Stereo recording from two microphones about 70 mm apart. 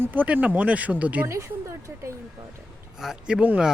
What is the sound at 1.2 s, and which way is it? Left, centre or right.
Speech, right.